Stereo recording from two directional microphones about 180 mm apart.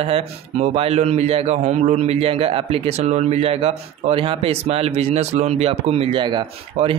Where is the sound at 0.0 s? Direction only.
35° right (ahead or behind).